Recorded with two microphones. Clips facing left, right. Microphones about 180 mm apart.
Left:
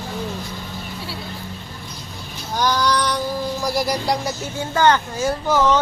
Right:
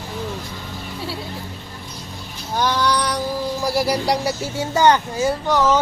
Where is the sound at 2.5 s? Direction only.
5° right (ahead or behind).